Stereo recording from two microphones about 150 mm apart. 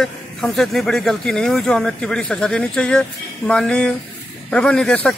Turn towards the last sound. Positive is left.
turn(degrees=10)  # may be behind; listen again after turning